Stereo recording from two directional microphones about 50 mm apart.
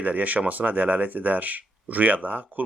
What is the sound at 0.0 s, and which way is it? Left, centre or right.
Speech, right.